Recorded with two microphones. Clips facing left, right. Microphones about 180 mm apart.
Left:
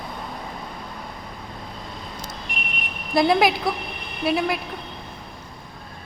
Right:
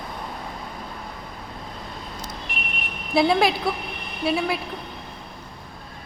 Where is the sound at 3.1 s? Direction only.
Centre (ahead or behind).